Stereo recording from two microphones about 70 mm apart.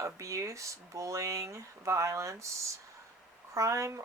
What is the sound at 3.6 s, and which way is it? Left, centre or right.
Speech, right.